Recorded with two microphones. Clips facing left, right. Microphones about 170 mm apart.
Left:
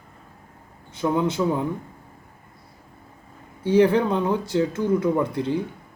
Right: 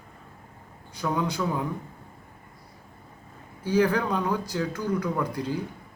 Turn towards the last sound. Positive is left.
turn(degrees=25)  # may be behind; listen again after turning